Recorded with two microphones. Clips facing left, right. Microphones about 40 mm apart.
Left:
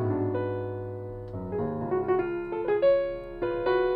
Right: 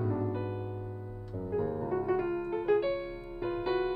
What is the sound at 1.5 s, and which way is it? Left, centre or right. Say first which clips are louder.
Piano: left 3 dB; centre.